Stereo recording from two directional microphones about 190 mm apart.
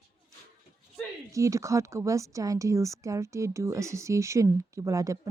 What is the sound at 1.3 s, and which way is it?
Speech, 15° right (ahead or behind).